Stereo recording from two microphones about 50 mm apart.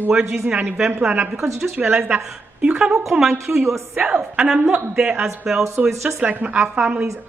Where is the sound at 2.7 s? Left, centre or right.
Centre.